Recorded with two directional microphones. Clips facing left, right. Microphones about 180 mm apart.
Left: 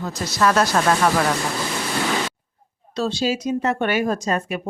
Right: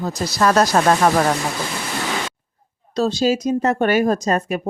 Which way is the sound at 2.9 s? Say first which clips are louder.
Right 4 dB; 40° right (ahead or behind).